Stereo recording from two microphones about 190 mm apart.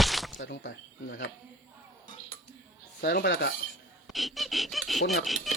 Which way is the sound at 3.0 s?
60° left (ahead or behind).